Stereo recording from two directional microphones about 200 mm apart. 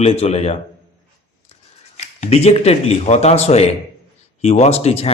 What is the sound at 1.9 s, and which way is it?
Speech, 30° left (ahead or behind).